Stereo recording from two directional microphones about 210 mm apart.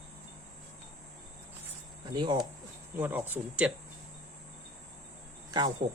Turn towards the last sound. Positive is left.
turn(degrees=-20)  # may be behind; listen again after turning